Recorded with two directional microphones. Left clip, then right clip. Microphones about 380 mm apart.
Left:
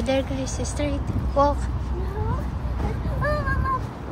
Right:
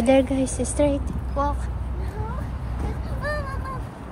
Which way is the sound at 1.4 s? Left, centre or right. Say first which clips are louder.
Left 5 dB; centre.